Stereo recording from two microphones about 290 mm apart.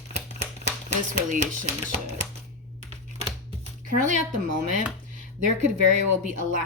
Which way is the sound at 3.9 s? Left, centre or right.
Right.